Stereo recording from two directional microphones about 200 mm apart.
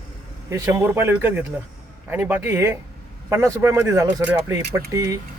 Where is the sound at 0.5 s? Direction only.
15° right (ahead or behind).